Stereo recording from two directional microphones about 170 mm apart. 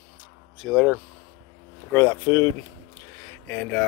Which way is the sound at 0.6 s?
Centre (ahead or behind).